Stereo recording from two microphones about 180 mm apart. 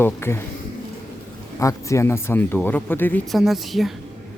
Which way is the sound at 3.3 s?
Centre (ahead or behind).